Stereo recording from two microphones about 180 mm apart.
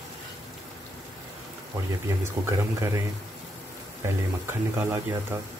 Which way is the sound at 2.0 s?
15° right (ahead or behind).